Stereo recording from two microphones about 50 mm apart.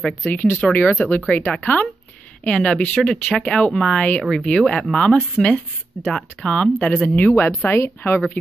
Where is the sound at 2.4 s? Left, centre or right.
Left.